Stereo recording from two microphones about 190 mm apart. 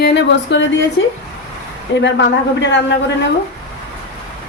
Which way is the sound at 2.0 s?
70° left (ahead or behind).